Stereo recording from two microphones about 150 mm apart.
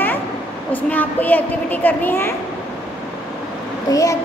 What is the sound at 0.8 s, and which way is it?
A woman's voice, 10° left (ahead or behind).